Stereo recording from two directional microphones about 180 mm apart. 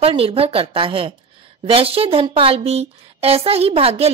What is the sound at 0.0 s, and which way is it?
A woman's voice, 30° right (ahead or behind).